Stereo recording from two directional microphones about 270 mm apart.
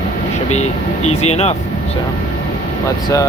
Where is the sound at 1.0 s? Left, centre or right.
Left.